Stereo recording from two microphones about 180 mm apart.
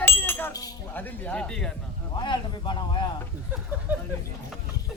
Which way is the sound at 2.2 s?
25° left (ahead or behind).